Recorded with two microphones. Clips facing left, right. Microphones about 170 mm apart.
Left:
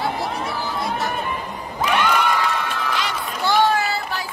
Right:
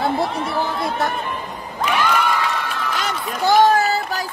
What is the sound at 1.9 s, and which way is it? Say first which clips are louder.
Cheering: even; centre (ahead or behind).